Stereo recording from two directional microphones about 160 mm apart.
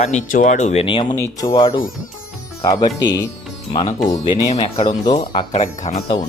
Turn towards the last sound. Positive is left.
turn(degrees=40)  # may be behind; listen again after turning